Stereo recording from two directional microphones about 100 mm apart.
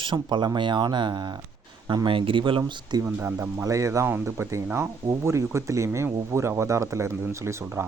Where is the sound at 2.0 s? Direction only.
60° right (ahead or behind).